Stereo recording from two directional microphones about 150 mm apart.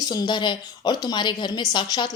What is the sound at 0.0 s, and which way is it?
Speech, 25° left (ahead or behind).